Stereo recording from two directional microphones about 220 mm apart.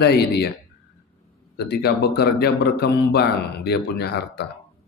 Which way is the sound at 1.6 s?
45° left (ahead or behind).